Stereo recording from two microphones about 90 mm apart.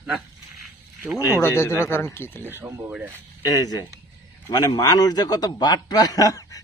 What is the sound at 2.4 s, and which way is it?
Speech, 25° right (ahead or behind).